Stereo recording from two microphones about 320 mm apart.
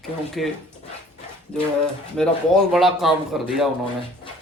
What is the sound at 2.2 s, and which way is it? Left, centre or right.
Speech, centre.